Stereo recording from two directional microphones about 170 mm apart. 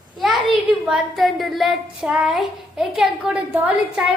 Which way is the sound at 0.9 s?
Centre (ahead or behind).